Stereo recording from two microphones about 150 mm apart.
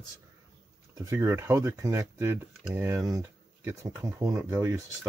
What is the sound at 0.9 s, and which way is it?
Speech, 20° right (ahead or behind).